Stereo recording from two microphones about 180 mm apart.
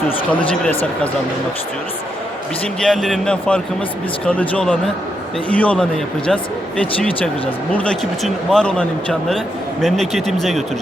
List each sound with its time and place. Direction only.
0.3 s speech: 10° left (ahead or behind)
2.8 s speech: centre (ahead or behind)